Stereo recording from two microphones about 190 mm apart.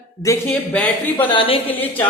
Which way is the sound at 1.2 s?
25° left (ahead or behind).